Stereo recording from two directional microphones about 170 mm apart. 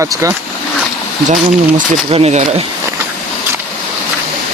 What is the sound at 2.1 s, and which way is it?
Speech, 35° right (ahead or behind).